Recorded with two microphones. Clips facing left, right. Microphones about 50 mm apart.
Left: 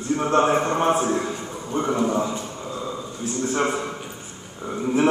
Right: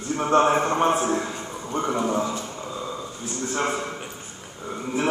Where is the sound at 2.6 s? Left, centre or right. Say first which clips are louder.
Left 1 dB; centre.